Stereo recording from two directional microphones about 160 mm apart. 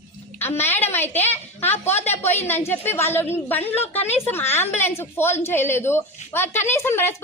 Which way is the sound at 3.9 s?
40° left (ahead or behind).